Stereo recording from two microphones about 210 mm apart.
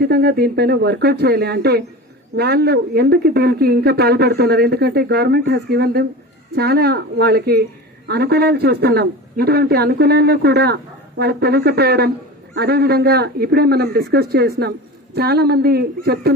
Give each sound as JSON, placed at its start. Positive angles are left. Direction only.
{"t": 0.0, "sound": "speech", "side_deg": -50}